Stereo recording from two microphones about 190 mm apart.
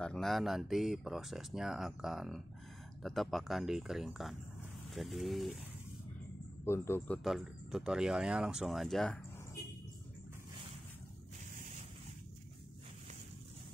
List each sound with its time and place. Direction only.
0.0 s speech: 5° left (ahead or behind)
6.6 s speech: 15° left (ahead or behind)
7.2 s speech: centre (ahead or behind)
9.6 s a sound: 55° left (ahead or behind)